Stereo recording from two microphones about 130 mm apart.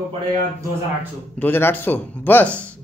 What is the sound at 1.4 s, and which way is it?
A man's voice, 15° left (ahead or behind).